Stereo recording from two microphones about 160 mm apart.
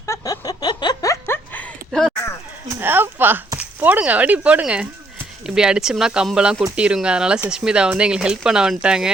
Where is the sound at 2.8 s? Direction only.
15° right (ahead or behind).